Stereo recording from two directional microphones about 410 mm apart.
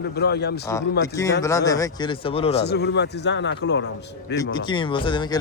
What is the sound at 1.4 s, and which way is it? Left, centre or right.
Speech, centre.